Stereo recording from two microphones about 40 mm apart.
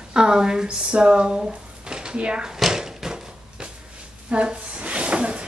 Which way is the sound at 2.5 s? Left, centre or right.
Centre.